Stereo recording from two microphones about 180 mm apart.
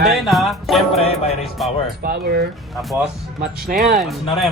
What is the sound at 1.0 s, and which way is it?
Music, 35° left (ahead or behind).